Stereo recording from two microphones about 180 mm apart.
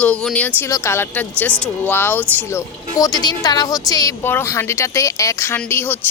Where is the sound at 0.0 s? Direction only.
5° left (ahead or behind).